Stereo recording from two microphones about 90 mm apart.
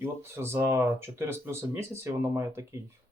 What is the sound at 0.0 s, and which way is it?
Speech, 25° right (ahead or behind).